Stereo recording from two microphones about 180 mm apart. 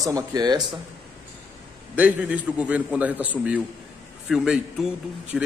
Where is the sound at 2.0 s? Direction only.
10° right (ahead or behind).